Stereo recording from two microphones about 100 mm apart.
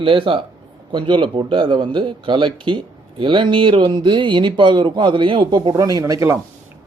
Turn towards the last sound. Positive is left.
turn(degrees=-35)  # may be behind; listen again after turning